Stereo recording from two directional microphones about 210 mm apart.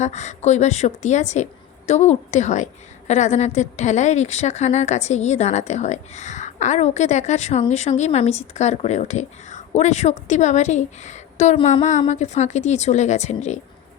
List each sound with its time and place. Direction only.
0.0 s a woman's voice: 35° left (ahead or behind)